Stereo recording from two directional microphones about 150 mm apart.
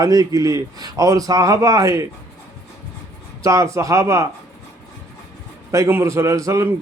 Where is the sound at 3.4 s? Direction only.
20° right (ahead or behind).